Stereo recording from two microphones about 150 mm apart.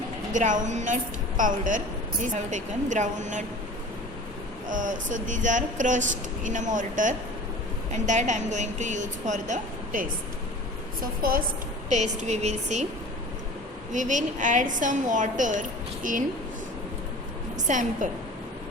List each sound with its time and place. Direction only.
0.3 s a woman's voice: 55° right (ahead or behind)
4.7 s a woman's voice: 60° right (ahead or behind)
11.2 s a woman's voice: 75° right (ahead or behind)
11.9 s a woman's voice: 50° right (ahead or behind)
13.9 s a woman's voice: 55° right (ahead or behind)
17.7 s a woman's voice: 55° right (ahead or behind)